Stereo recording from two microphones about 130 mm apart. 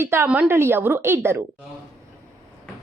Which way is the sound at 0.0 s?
20° right (ahead or behind).